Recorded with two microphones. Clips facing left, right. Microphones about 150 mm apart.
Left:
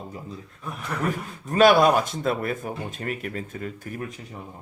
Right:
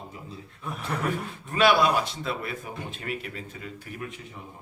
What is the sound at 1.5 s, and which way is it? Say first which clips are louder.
Speech: left 5 dB; 45° left (ahead or behind).